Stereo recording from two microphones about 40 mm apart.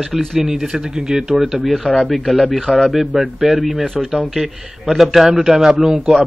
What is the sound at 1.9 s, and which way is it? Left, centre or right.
Speech, left.